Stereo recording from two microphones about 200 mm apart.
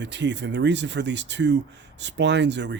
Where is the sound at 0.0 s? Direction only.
60° right (ahead or behind).